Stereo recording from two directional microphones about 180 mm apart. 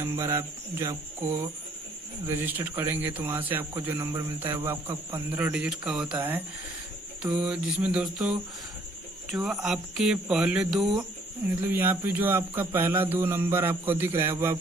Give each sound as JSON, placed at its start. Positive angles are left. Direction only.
{"t": 0.0, "sound": "speech", "side_deg": -15}